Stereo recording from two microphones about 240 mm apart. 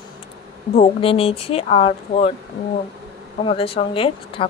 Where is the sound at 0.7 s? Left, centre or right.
Left.